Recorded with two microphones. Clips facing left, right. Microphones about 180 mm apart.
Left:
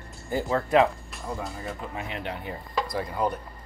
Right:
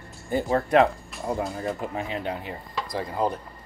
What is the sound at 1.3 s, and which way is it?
Speech, 65° right (ahead or behind).